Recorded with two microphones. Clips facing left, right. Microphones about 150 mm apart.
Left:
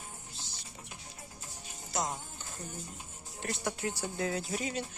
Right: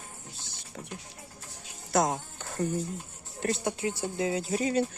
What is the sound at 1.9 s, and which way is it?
Speech, 65° right (ahead or behind).